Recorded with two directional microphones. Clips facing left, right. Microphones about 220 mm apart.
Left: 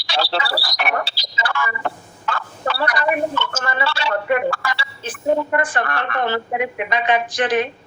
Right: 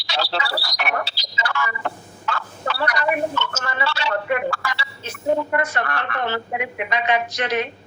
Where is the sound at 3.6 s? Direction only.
50° left (ahead or behind).